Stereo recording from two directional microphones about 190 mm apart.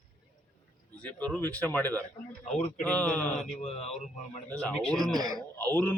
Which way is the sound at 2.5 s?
35° left (ahead or behind).